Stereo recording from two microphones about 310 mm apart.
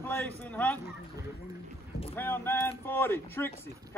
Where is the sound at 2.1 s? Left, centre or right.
Centre.